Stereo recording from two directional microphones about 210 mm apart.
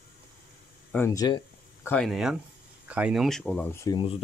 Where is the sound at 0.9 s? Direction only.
10° left (ahead or behind).